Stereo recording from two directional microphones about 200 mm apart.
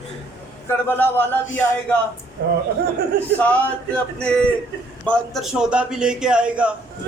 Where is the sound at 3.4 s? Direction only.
5° left (ahead or behind).